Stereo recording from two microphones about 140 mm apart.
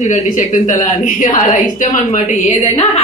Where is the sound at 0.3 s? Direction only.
70° left (ahead or behind).